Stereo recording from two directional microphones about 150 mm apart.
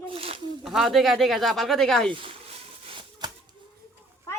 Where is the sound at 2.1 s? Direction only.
35° right (ahead or behind).